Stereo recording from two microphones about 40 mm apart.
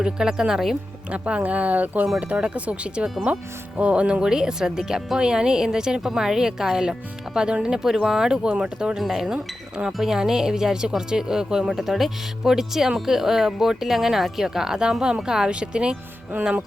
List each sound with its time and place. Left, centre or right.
0.0 s speech: centre
1.1 s speech: right
2.1 s speech: right
9.0 s speech: centre; by 16.0 s right
16.3 s speech: right